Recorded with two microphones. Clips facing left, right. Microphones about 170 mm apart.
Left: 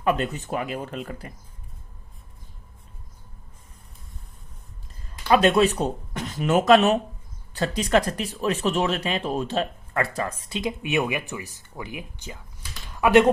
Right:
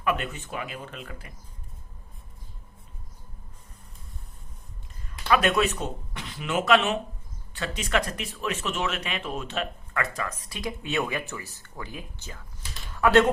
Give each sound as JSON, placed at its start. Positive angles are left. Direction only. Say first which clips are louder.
{"t": 0.0, "sound": "speech", "louder": "left 5 dB", "side_deg": 35}
{"t": 5.0, "sound": "speech", "louder": "left 5 dB", "side_deg": 30}